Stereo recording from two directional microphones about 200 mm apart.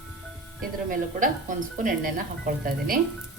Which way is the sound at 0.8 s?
40° right (ahead or behind).